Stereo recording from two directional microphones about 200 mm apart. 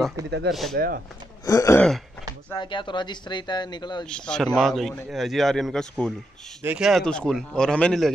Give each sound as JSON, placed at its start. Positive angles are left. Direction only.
{"t": 0.5, "sound": "a man's voice", "side_deg": 0}
{"t": 0.7, "sound": "speech", "side_deg": -50}
{"t": 1.4, "sound": "throat clearing", "side_deg": 15}
{"t": 2.5, "sound": "speech", "side_deg": 25}
{"t": 4.0, "sound": "a man's voice", "side_deg": 5}